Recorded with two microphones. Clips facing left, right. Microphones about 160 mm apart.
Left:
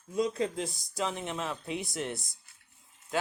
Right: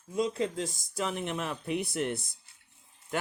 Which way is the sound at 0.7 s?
50° right (ahead or behind).